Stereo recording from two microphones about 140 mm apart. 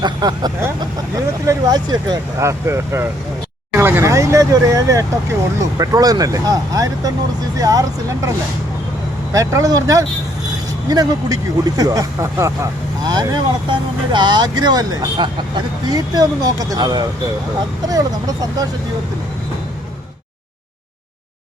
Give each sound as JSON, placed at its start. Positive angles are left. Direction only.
{"t": 0.0, "sound": "speech", "side_deg": -30}
{"t": 9.3, "sound": "speech", "side_deg": -25}